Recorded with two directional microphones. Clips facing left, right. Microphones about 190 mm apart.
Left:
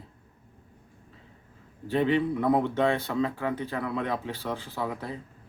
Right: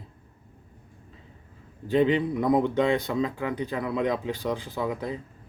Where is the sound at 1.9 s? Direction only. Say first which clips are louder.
Right 2 dB; 15° right (ahead or behind).